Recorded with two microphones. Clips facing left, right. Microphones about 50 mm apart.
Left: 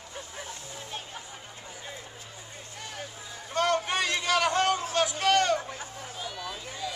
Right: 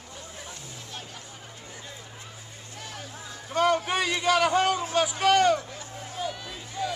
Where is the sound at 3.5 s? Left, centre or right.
Centre.